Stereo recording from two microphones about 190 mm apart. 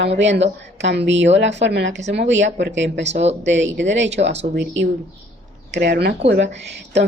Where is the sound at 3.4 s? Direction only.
70° right (ahead or behind).